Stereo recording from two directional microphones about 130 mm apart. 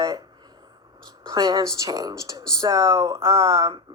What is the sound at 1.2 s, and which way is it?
Speech, 30° right (ahead or behind).